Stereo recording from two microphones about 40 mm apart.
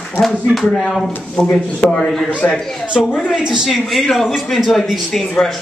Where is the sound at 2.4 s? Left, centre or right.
Left.